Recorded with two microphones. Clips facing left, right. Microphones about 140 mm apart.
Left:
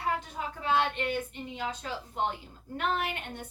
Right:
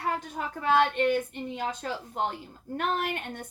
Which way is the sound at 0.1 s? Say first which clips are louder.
Even; 50° right (ahead or behind).